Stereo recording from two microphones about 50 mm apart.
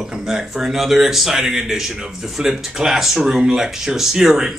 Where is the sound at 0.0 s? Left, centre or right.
Centre.